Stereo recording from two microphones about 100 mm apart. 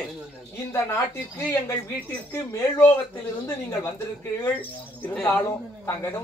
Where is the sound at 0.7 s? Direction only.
25° left (ahead or behind).